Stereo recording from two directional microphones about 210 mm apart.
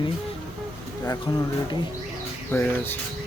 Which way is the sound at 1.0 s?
20° left (ahead or behind).